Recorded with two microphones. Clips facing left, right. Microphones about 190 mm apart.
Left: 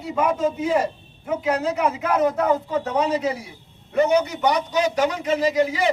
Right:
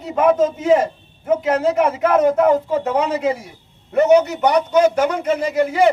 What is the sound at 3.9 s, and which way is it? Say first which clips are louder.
A man's voice: right 6 dB; 65° right (ahead or behind).